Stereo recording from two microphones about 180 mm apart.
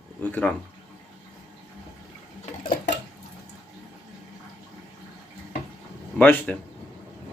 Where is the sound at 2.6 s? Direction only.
55° left (ahead or behind).